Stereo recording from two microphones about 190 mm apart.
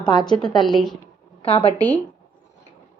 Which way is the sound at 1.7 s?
10° left (ahead or behind).